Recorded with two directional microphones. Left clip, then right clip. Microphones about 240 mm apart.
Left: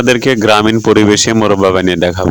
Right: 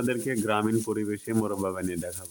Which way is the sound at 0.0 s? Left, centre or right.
Left.